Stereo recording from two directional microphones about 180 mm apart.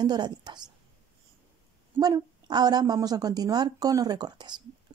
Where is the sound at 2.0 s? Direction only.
20° right (ahead or behind).